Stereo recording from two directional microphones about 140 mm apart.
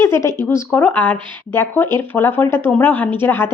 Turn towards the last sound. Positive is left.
turn(degrees=15)  # may be behind; listen again after turning